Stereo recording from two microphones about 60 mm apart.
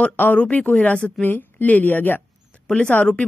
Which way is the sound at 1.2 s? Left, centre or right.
Left.